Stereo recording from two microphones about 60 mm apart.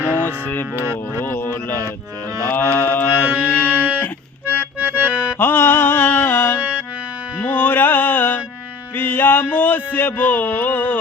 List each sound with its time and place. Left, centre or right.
0.0 s music: left
2.5 s mantra: left
3.3 s music: left
4.4 s accordion: right
5.4 s music: left
6.6 s music: right
7.3 s music: left
9.0 s a sound: left